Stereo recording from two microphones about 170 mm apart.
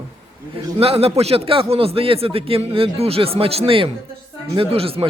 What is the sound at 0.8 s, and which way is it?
A man's voice, 35° right (ahead or behind).